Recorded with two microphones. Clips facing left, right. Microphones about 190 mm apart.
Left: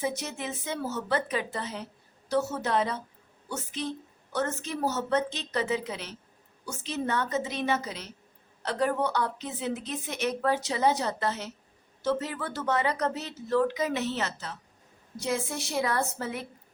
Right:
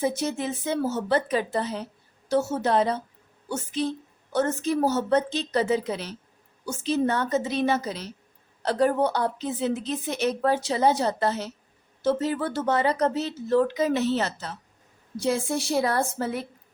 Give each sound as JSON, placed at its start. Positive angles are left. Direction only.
{"t": 0.2, "sound": "a woman's voice", "side_deg": -35}